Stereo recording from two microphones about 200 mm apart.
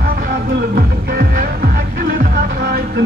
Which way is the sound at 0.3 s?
50° right (ahead or behind).